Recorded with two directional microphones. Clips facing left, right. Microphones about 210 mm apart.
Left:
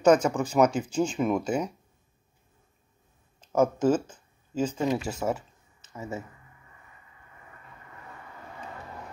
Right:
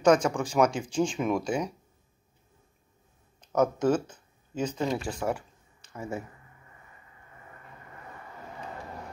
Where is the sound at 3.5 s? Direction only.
10° left (ahead or behind).